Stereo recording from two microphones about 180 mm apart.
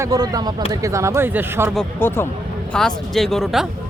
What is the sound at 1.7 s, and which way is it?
Speech, 10° left (ahead or behind).